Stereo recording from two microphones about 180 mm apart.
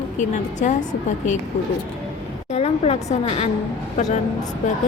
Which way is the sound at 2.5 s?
35° left (ahead or behind).